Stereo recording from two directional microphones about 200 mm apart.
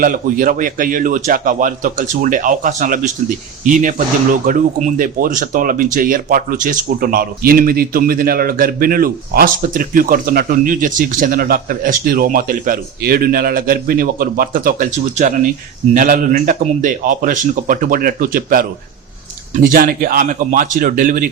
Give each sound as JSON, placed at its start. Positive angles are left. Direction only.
{"t": 0.0, "sound": "speech", "side_deg": -45}